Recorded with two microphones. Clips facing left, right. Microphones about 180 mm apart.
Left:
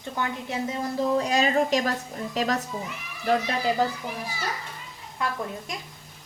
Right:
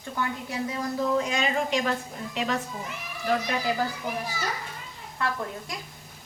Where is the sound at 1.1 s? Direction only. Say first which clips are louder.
Left 4 dB; 40° left (ahead or behind).